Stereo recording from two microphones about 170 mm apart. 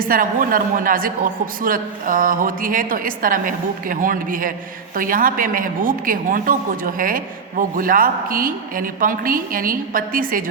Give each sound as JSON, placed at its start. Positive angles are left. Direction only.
{"t": 0.0, "sound": "a man's voice", "side_deg": -55}